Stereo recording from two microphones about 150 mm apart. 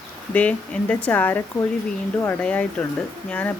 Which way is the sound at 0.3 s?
10° left (ahead or behind).